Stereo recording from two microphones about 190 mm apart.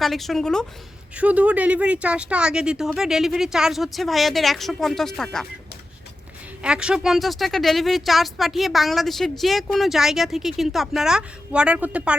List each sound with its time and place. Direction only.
0.0 s speech: centre (ahead or behind)
6.6 s speech: 5° right (ahead or behind)